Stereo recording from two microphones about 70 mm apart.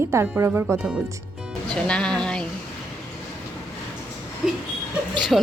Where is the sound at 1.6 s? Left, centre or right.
Centre.